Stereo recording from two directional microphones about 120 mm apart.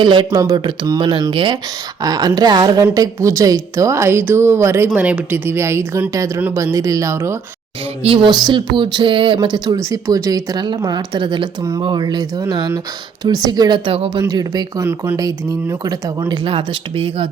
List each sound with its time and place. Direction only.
0.0 s speech: 40° right (ahead or behind)
0.3 s a woman's voice: 30° right (ahead or behind)
8.0 s speech: 45° right (ahead or behind)
14.2 s speech: 30° right (ahead or behind)
16.3 s speech: 45° right (ahead or behind)